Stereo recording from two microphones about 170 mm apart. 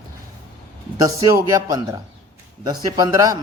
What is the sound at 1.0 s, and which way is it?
A man's voice, 20° right (ahead or behind).